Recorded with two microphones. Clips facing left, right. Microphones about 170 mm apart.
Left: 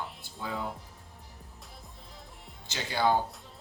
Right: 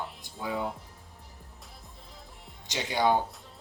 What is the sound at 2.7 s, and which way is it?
Speech, 20° right (ahead or behind).